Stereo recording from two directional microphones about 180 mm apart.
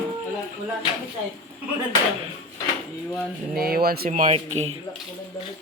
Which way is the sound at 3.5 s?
60° right (ahead or behind).